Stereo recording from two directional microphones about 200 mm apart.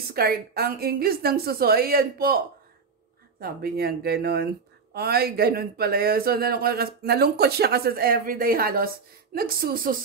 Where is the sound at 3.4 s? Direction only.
50° right (ahead or behind).